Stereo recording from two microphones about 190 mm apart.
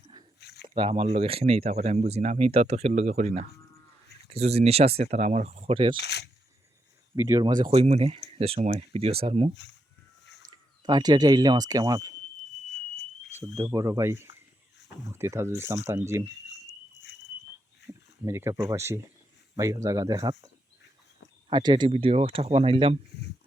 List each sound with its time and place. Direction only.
0.3 s a sound: 60° left (ahead or behind)
0.7 s speech: 30° right (ahead or behind)
6.0 s speech: 60° left (ahead or behind)
7.2 s speech: 15° right (ahead or behind)
7.6 s speech: 30° right (ahead or behind)
10.5 s speech: 20° right (ahead or behind)
13.4 s speech: 15° right (ahead or behind)
17.1 s a sound: 65° left (ahead or behind)
17.8 s speech: 15° right (ahead or behind)
21.5 s speech: 25° right (ahead or behind)